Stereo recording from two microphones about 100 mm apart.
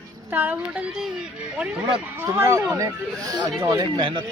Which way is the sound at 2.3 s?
30° right (ahead or behind).